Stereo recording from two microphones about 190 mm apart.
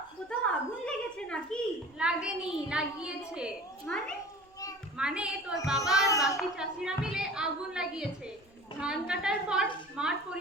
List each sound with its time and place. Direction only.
0.9 s a sound: 5° left (ahead or behind)
2.0 s a woman's voice: 5° right (ahead or behind)
6.1 s a child's voice: 15° left (ahead or behind)
6.3 s a woman's voice: 5° right (ahead or behind)
9.9 s dishes: 5° right (ahead or behind)